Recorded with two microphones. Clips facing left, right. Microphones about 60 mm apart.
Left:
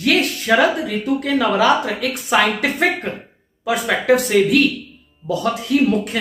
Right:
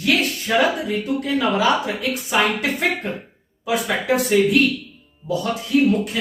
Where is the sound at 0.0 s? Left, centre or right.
Left.